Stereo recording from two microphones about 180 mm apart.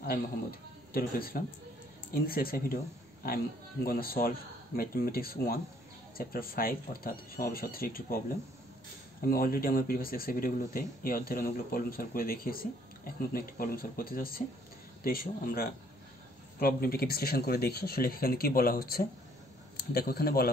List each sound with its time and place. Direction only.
0.0 s a man's voice: 55° left (ahead or behind)
3.8 s speech: 55° left (ahead or behind)
9.2 s speech: 55° left (ahead or behind)